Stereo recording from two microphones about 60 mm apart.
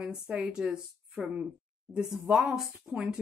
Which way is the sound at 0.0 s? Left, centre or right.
Centre.